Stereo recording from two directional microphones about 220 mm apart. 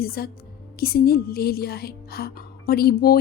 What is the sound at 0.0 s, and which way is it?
Speech, 45° left (ahead or behind).